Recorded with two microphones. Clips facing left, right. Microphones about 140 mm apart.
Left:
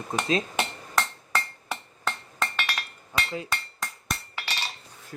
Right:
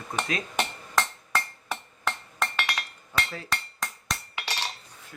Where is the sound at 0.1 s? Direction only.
25° left (ahead or behind).